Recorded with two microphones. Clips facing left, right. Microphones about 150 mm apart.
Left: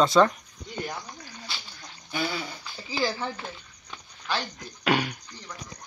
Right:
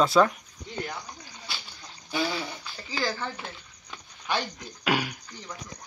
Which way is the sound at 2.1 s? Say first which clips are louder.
Right 1 dB; 30° right (ahead or behind).